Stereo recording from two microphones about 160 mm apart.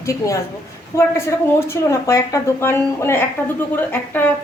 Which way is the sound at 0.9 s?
20° left (ahead or behind).